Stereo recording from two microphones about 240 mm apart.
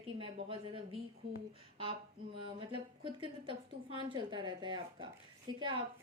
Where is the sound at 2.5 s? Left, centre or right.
Right.